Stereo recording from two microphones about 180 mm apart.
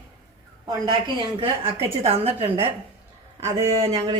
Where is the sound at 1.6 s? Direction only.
30° right (ahead or behind).